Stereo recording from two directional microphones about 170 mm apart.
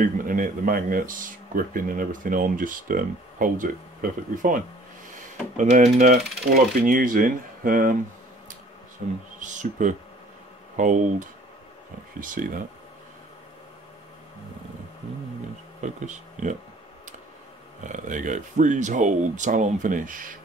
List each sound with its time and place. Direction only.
0.0 s speech: 55° right (ahead or behind)
9.0 s speech: 50° right (ahead or behind)
15.8 s speech: 45° right (ahead or behind)
17.8 s speech: 50° right (ahead or behind)